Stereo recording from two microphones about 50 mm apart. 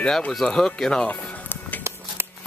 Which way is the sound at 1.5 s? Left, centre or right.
Left.